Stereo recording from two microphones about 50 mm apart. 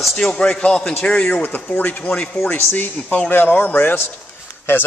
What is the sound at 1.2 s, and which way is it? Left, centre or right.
A man's voice, left.